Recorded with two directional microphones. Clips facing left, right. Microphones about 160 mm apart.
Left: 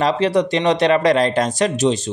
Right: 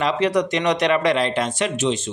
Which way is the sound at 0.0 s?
30° left (ahead or behind).